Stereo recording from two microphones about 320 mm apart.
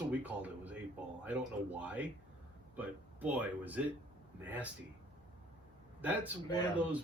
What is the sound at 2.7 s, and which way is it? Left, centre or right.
Speech, centre.